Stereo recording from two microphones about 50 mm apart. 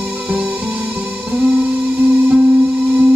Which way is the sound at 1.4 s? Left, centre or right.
Right.